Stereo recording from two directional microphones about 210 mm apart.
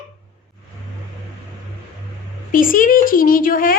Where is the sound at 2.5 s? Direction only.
40° left (ahead or behind).